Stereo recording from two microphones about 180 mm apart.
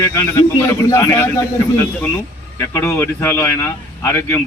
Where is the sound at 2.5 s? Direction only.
15° left (ahead or behind).